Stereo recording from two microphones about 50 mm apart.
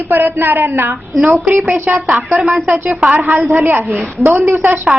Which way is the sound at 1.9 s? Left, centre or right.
Centre.